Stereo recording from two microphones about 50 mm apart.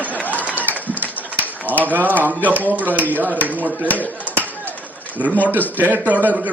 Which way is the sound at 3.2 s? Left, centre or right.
Right.